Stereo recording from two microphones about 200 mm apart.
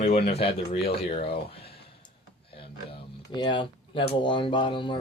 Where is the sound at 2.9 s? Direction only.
25° left (ahead or behind).